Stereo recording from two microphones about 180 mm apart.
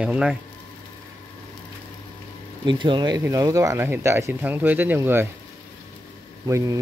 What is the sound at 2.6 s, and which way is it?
Speech, 25° right (ahead or behind).